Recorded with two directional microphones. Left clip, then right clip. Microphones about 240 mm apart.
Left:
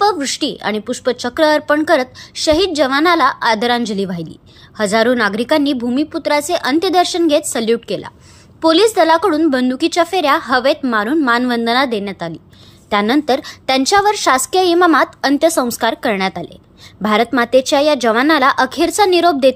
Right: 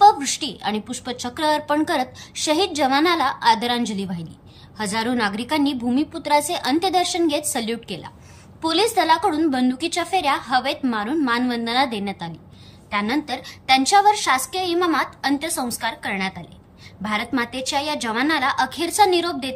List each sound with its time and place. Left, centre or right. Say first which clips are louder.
0.0 s a woman's voice: even; centre